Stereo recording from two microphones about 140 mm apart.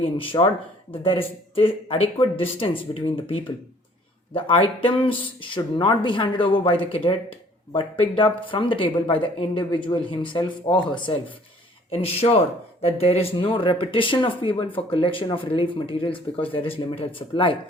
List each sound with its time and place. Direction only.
0.0 s speech: 40° left (ahead or behind)
4.4 s speech: 40° left (ahead or behind)
11.9 s speech: 45° left (ahead or behind)